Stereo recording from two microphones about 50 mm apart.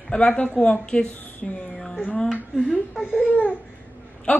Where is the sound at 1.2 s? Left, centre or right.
Left.